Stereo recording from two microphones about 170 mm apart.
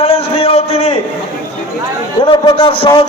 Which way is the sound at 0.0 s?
35° left (ahead or behind).